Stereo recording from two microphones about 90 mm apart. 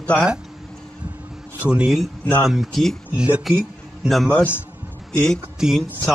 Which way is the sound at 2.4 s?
Centre (ahead or behind).